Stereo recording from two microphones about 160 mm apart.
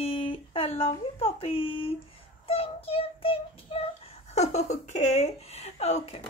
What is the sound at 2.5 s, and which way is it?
Child singing, 40° left (ahead or behind).